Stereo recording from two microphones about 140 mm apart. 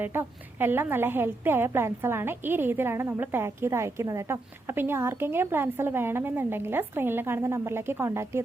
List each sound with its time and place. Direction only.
0.0 s a woman's voice: 15° right (ahead or behind)